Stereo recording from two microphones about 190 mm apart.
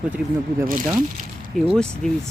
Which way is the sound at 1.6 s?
5° left (ahead or behind).